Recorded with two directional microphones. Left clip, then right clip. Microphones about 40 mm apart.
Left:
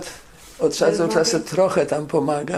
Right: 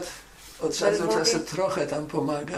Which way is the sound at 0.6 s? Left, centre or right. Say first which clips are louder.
Left 6 dB; left.